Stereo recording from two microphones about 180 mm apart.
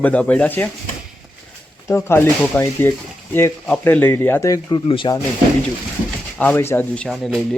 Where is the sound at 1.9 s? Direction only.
15° left (ahead or behind).